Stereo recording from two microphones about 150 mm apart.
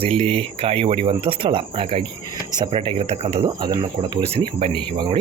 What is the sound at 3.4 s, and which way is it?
Speech, 30° right (ahead or behind).